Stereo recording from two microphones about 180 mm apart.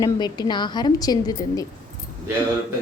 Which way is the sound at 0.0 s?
25° left (ahead or behind).